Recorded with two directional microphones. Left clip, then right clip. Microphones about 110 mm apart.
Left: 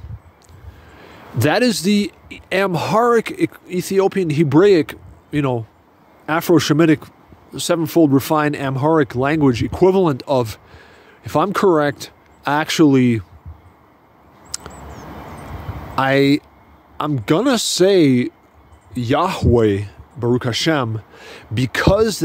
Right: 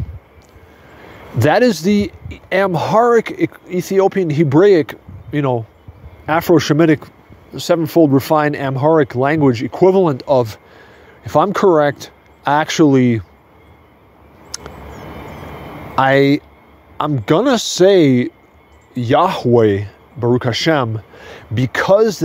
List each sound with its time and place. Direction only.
0.9 s speech: 35° left (ahead or behind)
14.5 s a sound: 35° left (ahead or behind)
15.9 s speech: 30° left (ahead or behind)